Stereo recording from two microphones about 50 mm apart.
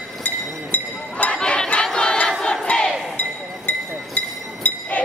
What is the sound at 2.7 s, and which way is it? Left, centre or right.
Battle cry, left.